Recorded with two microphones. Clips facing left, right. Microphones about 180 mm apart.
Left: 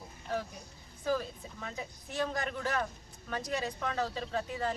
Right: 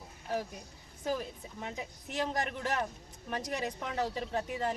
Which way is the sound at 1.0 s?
20° right (ahead or behind).